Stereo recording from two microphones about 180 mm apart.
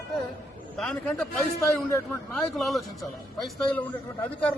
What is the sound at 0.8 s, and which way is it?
A man's voice, 5° left (ahead or behind).